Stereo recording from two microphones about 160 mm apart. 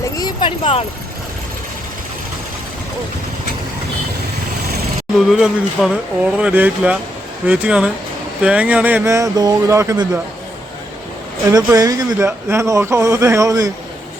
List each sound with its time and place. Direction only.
0.2 s a sound: 30° left (ahead or behind)
5.1 s speech: centre (ahead or behind); by 10.1 s 20° right (ahead or behind)
11.5 s speech: 20° right (ahead or behind)